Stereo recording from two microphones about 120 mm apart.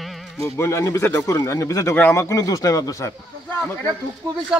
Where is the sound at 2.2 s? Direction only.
30° left (ahead or behind).